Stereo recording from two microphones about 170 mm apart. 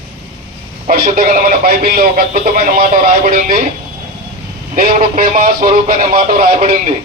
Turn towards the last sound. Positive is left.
turn(degrees=-55)  # may be behind; listen again after turning